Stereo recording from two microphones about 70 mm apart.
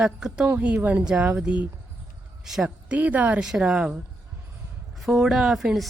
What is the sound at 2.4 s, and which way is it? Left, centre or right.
Speech, centre.